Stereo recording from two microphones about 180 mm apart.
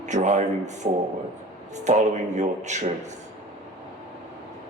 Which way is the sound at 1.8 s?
40° right (ahead or behind).